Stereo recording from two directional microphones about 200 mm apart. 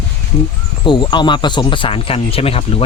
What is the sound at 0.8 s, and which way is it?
Speech, 25° left (ahead or behind).